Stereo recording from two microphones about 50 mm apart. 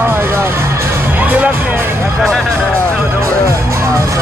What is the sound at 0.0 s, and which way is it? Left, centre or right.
Music, right.